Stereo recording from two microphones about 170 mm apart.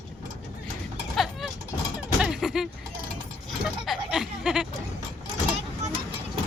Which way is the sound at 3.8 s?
Centre (ahead or behind).